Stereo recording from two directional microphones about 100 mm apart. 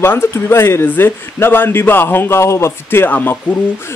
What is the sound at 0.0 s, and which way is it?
A man's voice, 25° left (ahead or behind).